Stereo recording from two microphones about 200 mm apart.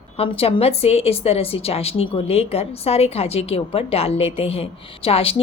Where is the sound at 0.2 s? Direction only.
30° left (ahead or behind).